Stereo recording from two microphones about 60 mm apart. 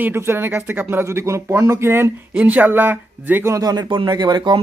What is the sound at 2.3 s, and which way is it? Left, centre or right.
Speech, right.